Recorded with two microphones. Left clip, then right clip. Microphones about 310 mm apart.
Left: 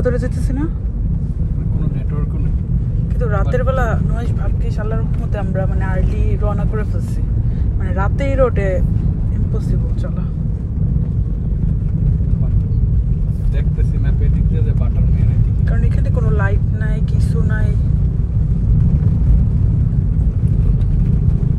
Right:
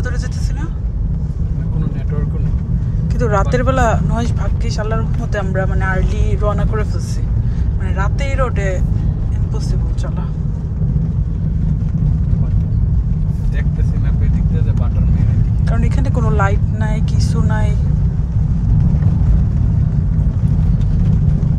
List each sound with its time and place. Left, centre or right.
3.2 s speech: centre
8.0 s speech: centre
15.7 s speech: centre